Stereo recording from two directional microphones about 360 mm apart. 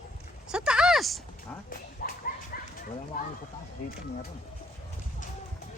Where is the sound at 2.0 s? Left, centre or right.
Left.